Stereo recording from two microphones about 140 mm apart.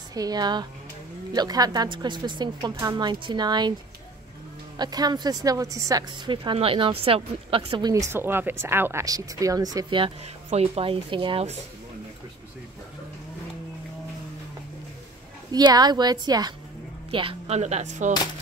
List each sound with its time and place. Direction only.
0.1 s a woman's voice: 25° right (ahead or behind)
4.7 s speech: 30° right (ahead or behind)
6.3 s a woman's voice: 40° right (ahead or behind)
8.1 s speech: 15° right (ahead or behind); by 11.4 s 35° right (ahead or behind)
15.5 s speech: 30° right (ahead or behind)
17.1 s speech: 40° right (ahead or behind); by 18.1 s 60° right (ahead or behind)